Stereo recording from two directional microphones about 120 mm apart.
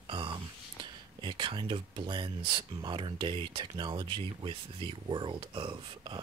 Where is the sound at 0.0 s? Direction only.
40° right (ahead or behind).